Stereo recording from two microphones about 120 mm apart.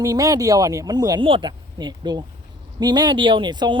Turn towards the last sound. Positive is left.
turn(degrees=-40)  # may be behind; listen again after turning